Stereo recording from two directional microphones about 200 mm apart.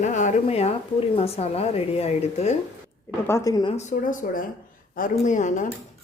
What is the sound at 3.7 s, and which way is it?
A woman's voice, 40° left (ahead or behind).